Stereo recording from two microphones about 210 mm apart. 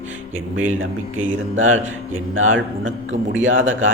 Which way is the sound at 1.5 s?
70° right (ahead or behind).